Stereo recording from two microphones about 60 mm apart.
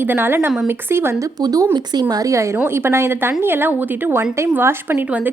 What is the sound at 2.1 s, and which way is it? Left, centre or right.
Speech, right.